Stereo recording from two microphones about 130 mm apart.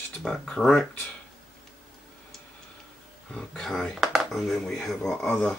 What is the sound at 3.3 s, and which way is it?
Speech, 5° left (ahead or behind).